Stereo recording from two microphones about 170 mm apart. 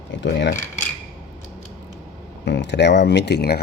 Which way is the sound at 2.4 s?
90° left.